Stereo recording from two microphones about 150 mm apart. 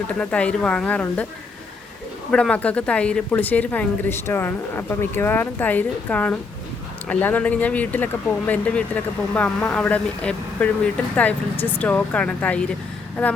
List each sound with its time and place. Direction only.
0.1 s a woman's voice: 10° left (ahead or behind)
2.3 s a woman's voice: 5° left (ahead or behind)